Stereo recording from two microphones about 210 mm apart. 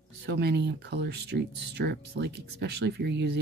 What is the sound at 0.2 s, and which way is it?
Speech, 50° right (ahead or behind).